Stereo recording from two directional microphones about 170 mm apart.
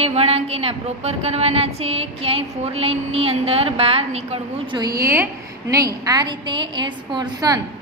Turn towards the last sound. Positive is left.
turn(degrees=-25)  # may be behind; listen again after turning